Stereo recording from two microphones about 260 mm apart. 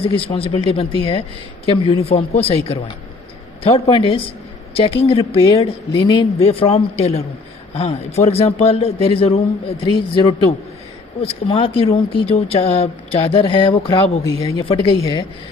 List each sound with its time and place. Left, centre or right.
0.0 s speech: left
11.2 s speech: left